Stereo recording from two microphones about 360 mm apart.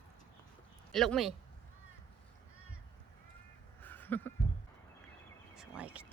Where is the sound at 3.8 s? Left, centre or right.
Centre.